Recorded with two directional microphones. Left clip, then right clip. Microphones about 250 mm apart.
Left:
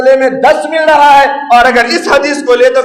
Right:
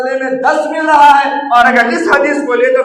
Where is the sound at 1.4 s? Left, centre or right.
Left.